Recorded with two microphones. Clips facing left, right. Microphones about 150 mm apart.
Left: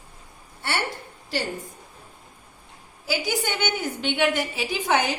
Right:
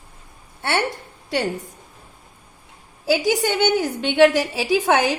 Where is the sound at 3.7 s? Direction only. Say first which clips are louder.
Right 11 dB; 85° right.